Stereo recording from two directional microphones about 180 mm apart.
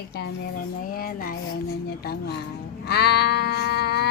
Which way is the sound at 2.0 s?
60° left (ahead or behind).